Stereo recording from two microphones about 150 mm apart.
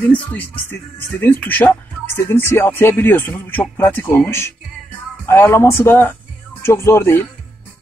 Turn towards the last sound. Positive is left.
turn(degrees=15)  # may be behind; listen again after turning